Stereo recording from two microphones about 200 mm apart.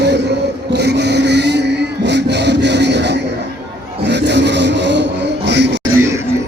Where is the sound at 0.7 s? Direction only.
55° right (ahead or behind).